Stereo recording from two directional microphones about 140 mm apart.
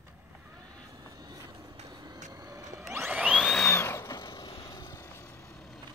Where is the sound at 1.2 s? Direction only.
30° right (ahead or behind).